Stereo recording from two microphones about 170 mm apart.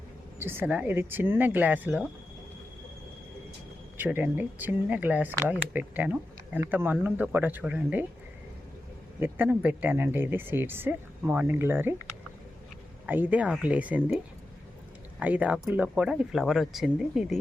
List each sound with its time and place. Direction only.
0.3 s speech: 15° right (ahead or behind)
3.9 s speech: 10° right (ahead or behind)
9.2 s speech: 10° right (ahead or behind)
13.1 s speech: 10° right (ahead or behind)
15.2 s speech: 10° right (ahead or behind)